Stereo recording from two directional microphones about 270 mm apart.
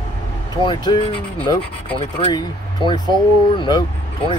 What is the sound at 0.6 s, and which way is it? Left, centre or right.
Speech, centre.